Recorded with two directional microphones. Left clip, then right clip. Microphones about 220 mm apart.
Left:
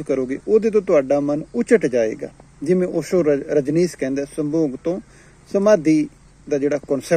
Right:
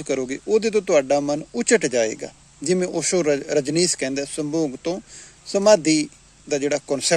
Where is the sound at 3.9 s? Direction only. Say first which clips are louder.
Left 1 dB; 10° right (ahead or behind).